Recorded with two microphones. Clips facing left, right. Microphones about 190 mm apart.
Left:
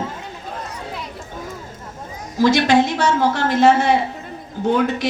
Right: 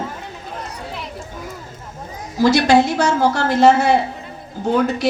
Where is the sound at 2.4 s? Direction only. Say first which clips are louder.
Right 1 dB; 40° right (ahead or behind).